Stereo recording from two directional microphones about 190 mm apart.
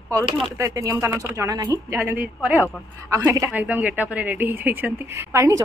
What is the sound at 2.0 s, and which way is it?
Speech, 10° right (ahead or behind).